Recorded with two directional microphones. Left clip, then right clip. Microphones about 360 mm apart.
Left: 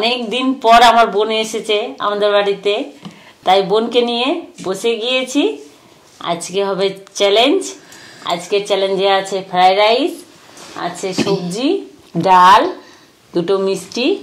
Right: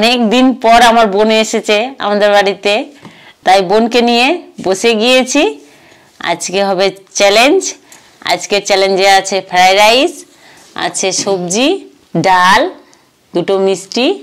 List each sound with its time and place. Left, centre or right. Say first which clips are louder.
0.0 s a woman's voice: right 7 dB; right
11.2 s a woman's voice: right 5 dB; right